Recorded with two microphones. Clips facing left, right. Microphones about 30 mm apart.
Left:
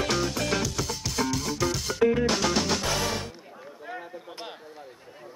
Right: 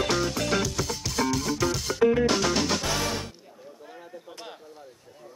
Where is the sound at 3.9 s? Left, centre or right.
Left.